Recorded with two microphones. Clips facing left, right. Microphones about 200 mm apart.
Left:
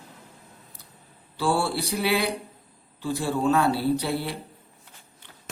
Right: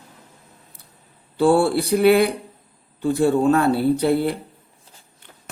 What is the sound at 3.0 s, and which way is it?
A man's voice, 55° right (ahead or behind).